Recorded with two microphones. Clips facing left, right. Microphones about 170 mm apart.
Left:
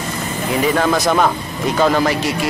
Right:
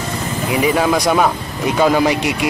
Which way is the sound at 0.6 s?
10° right (ahead or behind).